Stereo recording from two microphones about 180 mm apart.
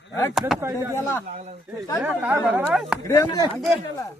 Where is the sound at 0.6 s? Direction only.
15° right (ahead or behind).